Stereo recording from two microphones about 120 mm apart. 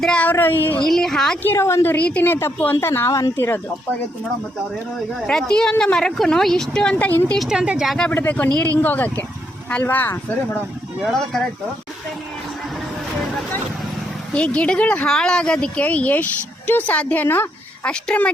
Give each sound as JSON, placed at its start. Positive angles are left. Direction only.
{"t": 0.0, "sound": "speech", "side_deg": 10}
{"t": 0.9, "sound": "speech", "side_deg": 5}
{"t": 1.4, "sound": "a woman's voice", "side_deg": 20}
{"t": 5.2, "sound": "speech", "side_deg": 5}
{"t": 7.3, "sound": "speech", "side_deg": -5}
{"t": 8.1, "sound": "speech", "side_deg": 15}
{"t": 11.0, "sound": "speech", "side_deg": 0}
{"t": 14.3, "sound": "speech", "side_deg": 10}